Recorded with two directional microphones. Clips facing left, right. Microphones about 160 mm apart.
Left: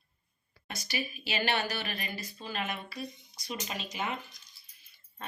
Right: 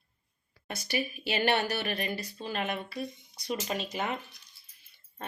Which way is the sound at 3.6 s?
45° right (ahead or behind).